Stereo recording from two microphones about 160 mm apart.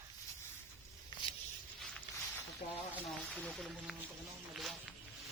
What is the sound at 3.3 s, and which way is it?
Speech, 10° left (ahead or behind).